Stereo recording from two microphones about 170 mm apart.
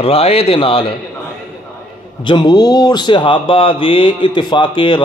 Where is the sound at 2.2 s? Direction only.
25° left (ahead or behind).